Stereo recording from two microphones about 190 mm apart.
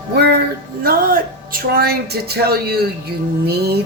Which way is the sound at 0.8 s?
50° right (ahead or behind).